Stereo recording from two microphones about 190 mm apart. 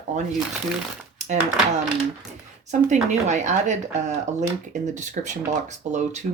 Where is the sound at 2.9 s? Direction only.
40° right (ahead or behind).